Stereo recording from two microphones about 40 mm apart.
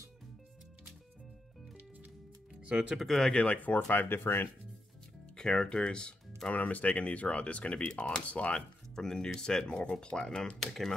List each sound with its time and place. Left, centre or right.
2.6 s speech: right
3.0 s speech: centre
3.4 s speech: left
3.9 s speech: left
5.3 s speech: centre
6.5 s speech: left
8.5 s speech: centre